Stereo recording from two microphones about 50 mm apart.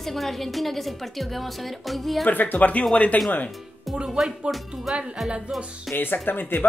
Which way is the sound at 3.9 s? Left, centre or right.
Centre.